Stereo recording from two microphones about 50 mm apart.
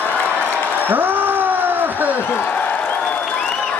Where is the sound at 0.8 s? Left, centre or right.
Right.